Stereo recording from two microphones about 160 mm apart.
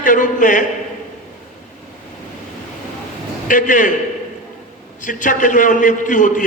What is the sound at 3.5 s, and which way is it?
Speech, 55° left (ahead or behind).